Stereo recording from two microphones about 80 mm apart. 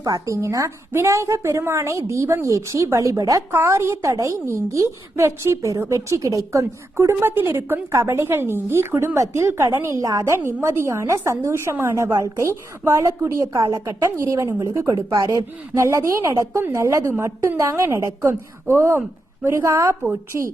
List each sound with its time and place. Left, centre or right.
0.0 s a woman's voice: right
10.3 s a woman's voice: right